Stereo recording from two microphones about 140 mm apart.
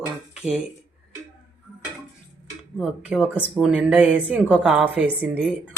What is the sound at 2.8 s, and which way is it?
A woman's voice, 5° right (ahead or behind).